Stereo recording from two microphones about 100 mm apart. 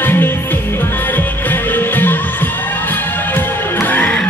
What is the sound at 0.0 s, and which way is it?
Music, 20° left (ahead or behind).